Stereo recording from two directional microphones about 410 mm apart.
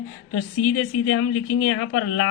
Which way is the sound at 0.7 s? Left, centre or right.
Left.